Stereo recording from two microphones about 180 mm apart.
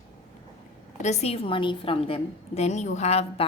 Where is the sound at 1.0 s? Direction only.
35° left (ahead or behind).